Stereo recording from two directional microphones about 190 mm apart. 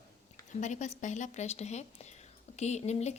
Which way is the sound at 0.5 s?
40° left (ahead or behind).